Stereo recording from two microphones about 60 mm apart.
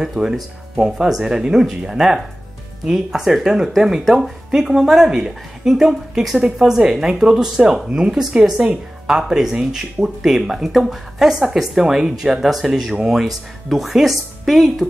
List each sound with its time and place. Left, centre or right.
0.0 s speech: centre